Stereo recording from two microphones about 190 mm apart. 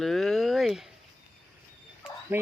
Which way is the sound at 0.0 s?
Centre (ahead or behind).